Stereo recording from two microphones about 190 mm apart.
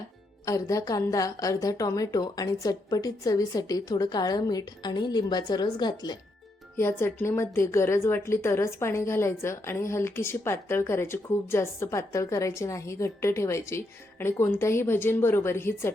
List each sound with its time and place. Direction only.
0.4 s a woman's voice: 15° left (ahead or behind)